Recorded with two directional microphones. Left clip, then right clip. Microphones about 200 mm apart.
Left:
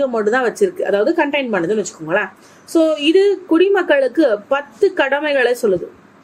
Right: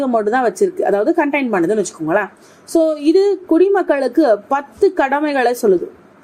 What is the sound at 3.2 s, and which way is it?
A woman's voice, 20° right (ahead or behind).